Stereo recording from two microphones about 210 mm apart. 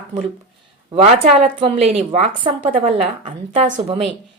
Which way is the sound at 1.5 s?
30° right (ahead or behind).